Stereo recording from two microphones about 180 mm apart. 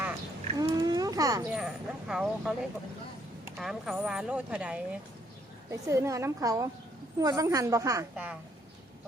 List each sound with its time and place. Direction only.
0.6 s a sound: 20° right (ahead or behind)
1.5 s speech: 5° right (ahead or behind)
3.6 s speech: centre (ahead or behind)
5.7 s a woman's voice: 15° right (ahead or behind)
8.1 s a woman's voice: 5° right (ahead or behind)